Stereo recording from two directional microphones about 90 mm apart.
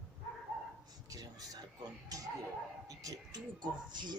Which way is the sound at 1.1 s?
45° right (ahead or behind).